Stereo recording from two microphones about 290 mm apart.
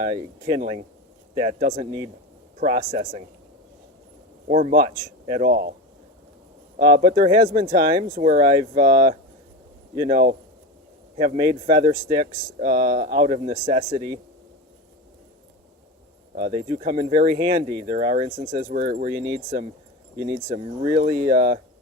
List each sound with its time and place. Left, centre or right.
0.1 s speech: centre
1.4 s speech: right
2.6 s speech: right
4.4 s speech: right
6.7 s speech: right
11.2 s speech: centre
16.5 s speech: centre
19.1 s speech: centre
21.2 s speech: right